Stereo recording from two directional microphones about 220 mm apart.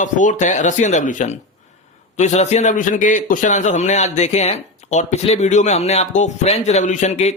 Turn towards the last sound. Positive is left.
turn(degrees=30)  # may be behind; listen again after turning